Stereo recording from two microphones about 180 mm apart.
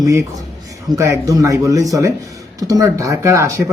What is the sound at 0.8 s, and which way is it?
Speech, 15° right (ahead or behind).